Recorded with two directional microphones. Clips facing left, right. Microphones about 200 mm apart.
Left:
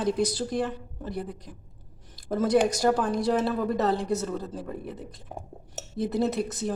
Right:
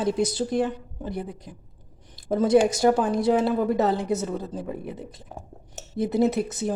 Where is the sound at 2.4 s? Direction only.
25° right (ahead or behind).